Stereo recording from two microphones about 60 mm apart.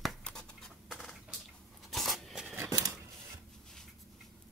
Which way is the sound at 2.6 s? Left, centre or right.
Right.